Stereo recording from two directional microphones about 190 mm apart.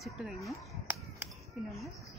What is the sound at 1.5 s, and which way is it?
Speech, centre (ahead or behind).